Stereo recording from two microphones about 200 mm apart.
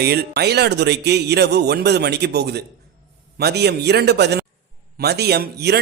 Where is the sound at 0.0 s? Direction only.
50° right (ahead or behind).